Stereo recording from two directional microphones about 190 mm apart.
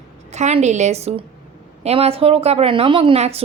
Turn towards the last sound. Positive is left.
turn(degrees=-30)  # may be behind; listen again after turning